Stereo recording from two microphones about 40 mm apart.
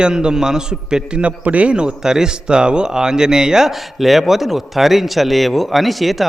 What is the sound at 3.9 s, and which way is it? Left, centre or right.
Speech, centre.